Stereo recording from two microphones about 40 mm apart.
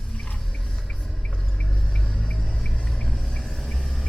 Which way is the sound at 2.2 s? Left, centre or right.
Centre.